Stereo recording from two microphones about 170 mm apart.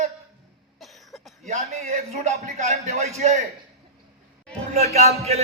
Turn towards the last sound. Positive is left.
turn(degrees=-40)  # may be behind; listen again after turning